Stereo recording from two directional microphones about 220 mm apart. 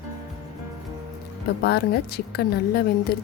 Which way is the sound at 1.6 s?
45° left (ahead or behind).